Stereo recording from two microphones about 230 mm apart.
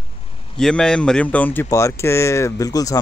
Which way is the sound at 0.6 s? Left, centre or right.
Centre.